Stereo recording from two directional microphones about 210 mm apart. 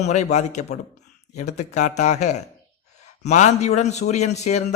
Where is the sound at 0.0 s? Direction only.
35° left (ahead or behind).